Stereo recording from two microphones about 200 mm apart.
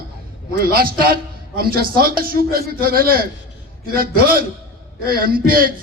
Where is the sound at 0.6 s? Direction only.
45° right (ahead or behind).